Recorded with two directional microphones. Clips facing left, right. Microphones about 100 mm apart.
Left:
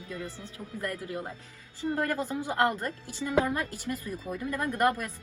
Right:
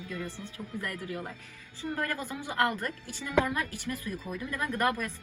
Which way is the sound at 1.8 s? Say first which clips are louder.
Left 4 dB; 20° left (ahead or behind).